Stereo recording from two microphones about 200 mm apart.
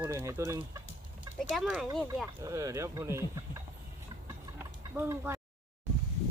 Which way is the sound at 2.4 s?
15° right (ahead or behind).